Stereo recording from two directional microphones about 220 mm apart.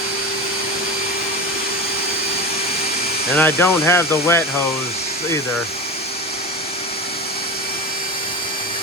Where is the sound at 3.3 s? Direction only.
10° left (ahead or behind).